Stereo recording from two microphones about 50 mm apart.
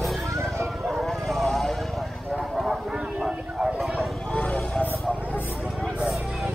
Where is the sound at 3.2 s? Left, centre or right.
Centre.